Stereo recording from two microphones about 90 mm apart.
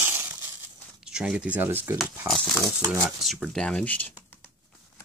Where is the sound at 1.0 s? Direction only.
10° right (ahead or behind).